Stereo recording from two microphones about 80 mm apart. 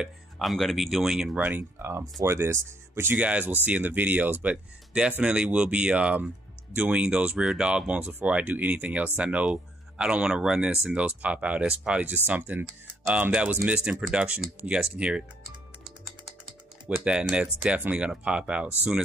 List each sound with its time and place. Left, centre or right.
0.4 s speech: centre
1.3 s speech: right
17.0 s speech: centre